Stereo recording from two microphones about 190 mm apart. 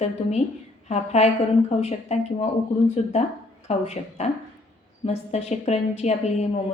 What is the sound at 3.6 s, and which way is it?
Speech, 35° left (ahead or behind).